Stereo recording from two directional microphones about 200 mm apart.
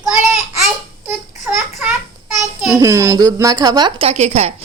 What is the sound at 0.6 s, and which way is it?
A child's voice, 5° right (ahead or behind).